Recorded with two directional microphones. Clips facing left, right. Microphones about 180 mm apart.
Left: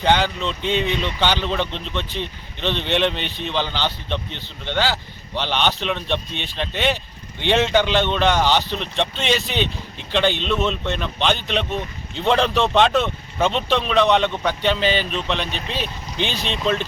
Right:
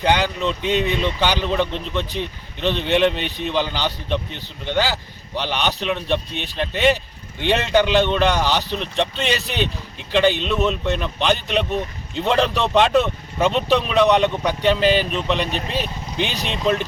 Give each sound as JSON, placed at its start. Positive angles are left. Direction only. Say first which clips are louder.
{"t": 0.0, "sound": "speech", "louder": "even", "side_deg": -5}